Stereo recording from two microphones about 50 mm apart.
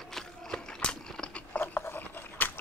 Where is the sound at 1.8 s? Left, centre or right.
Left.